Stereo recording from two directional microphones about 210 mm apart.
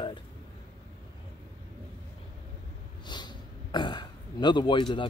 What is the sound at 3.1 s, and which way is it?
Speech, 20° left (ahead or behind).